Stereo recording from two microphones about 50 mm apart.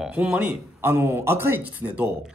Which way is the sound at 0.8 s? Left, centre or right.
Right.